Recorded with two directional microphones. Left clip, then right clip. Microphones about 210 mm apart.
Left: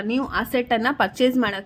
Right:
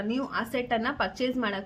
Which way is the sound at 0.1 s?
40° left (ahead or behind).